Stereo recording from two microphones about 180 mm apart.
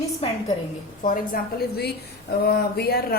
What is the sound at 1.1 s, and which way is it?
A woman's voice, 55° left (ahead or behind).